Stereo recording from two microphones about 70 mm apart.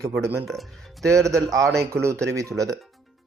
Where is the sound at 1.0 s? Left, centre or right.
Right.